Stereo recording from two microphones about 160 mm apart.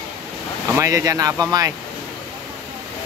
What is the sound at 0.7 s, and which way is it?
Speech, 20° right (ahead or behind).